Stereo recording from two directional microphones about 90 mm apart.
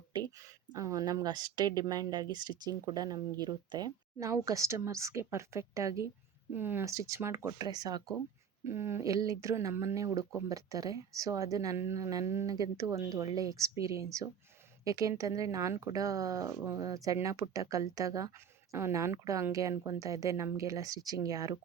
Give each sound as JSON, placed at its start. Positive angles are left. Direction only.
{"t": 0.1, "sound": "speech", "side_deg": -45}
{"t": 4.2, "sound": "speech", "side_deg": -40}
{"t": 6.5, "sound": "speech", "side_deg": -25}
{"t": 6.8, "sound": "speech", "side_deg": -35}
{"t": 7.6, "sound": "speech", "side_deg": -50}
{"t": 8.6, "sound": "speech", "side_deg": -30}
{"t": 12.5, "sound": "speech", "side_deg": -40}